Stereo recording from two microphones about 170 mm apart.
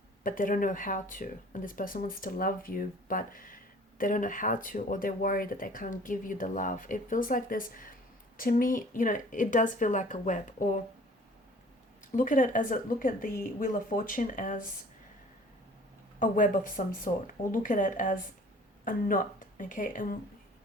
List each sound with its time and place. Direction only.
0.2 s speech: 50° left (ahead or behind)
12.1 s speech: 50° left (ahead or behind)
16.2 s speech: 55° left (ahead or behind)